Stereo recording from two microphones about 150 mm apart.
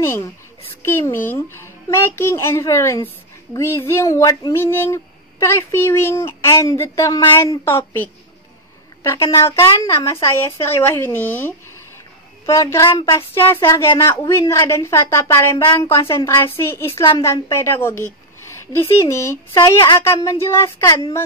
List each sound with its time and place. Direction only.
0.0 s a woman's voice: 15° left (ahead or behind)
20.0 s speech: 20° left (ahead or behind)